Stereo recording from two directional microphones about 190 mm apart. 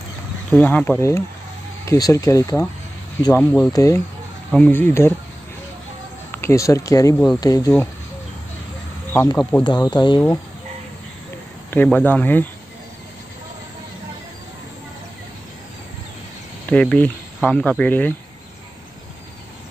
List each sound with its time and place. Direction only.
0.5 s speech: 5° left (ahead or behind)
6.3 s speech: 15° left (ahead or behind)
9.1 s speech: 15° left (ahead or behind)
9.6 s speech: 25° left (ahead or behind)
11.7 s speech: 10° left (ahead or behind)
16.7 s speech: 5° left (ahead or behind)